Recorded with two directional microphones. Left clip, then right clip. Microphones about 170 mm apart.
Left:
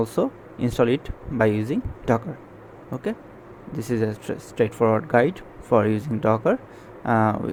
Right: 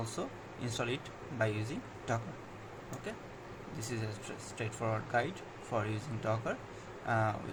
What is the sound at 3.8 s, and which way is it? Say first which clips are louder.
Speech: left 17 dB; 55° left (ahead or behind).